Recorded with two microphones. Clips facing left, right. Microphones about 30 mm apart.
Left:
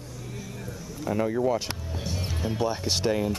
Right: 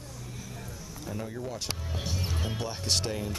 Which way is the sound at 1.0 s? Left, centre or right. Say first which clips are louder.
Left 12 dB; left.